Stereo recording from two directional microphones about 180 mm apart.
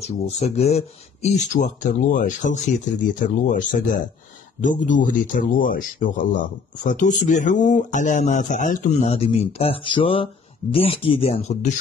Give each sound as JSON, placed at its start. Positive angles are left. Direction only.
{"t": 0.0, "sound": "speech", "side_deg": 35}